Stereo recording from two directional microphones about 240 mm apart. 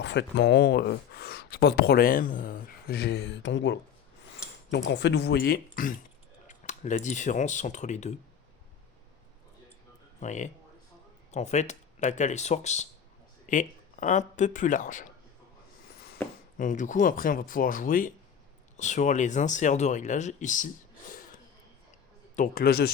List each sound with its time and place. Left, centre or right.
0.0 s speech: left
10.2 s speech: left
16.6 s speech: left
22.4 s speech: left